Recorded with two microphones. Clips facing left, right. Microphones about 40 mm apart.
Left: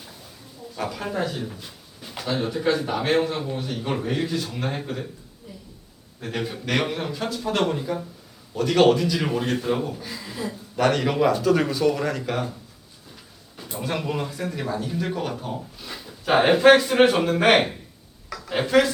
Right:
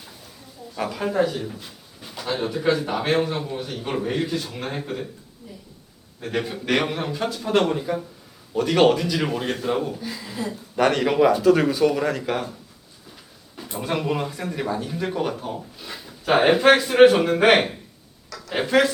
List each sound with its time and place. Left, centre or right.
0.8 s speech: centre
5.5 s a sound: centre
6.1 s speech: centre
13.6 s speech: centre